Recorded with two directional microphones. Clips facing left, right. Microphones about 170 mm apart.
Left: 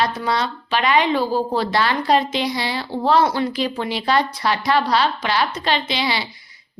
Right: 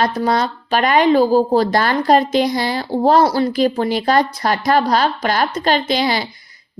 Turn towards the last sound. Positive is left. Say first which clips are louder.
# right 5 dB
turn(degrees=-45)  # may be behind; listen again after turning